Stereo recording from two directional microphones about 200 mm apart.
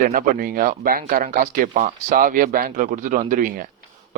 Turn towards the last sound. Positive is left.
turn(degrees=-45)  # may be behind; listen again after turning